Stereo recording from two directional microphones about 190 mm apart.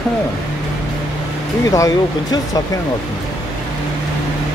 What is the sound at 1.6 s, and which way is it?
Speech, 20° left (ahead or behind).